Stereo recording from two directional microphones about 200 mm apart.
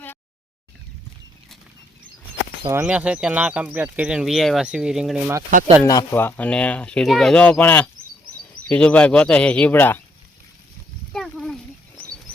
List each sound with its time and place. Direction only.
2.6 s speech: 10° right (ahead or behind)
5.5 s speech: 40° right (ahead or behind)
5.8 s speech: 15° left (ahead or behind)
11.1 s a sound: centre (ahead or behind)